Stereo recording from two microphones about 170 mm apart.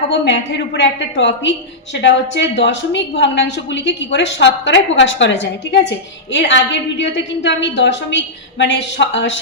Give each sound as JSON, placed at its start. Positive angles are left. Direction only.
{"t": 0.1, "sound": "a woman's voice", "side_deg": 90}